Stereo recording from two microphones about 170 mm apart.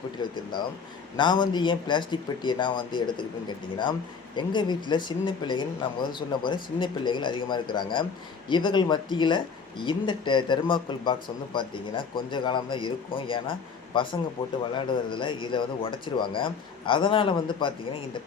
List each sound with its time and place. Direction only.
0.2 s speech: 25° left (ahead or behind)
4.4 s speech: 25° left (ahead or behind)